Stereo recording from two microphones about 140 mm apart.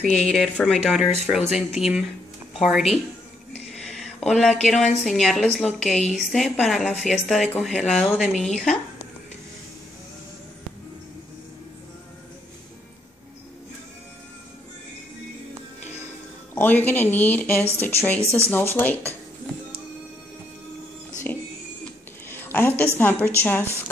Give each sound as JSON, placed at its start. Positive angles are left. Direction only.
{"t": 0.3, "sound": "a woman's voice", "side_deg": 0}
{"t": 16.5, "sound": "speech", "side_deg": 15}
{"t": 22.3, "sound": "a sound", "side_deg": 15}
{"t": 22.9, "sound": "speech", "side_deg": 15}